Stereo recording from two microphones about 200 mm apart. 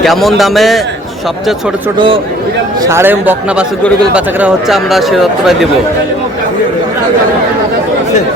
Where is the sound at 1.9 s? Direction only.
25° right (ahead or behind).